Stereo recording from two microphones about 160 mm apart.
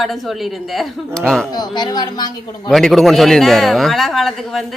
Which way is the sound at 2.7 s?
Centre (ahead or behind).